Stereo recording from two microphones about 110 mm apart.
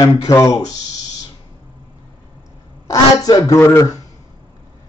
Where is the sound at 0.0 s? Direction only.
35° left (ahead or behind).